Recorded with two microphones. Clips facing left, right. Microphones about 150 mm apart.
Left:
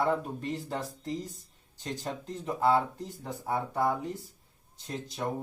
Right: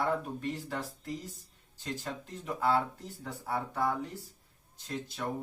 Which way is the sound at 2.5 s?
20° left (ahead or behind).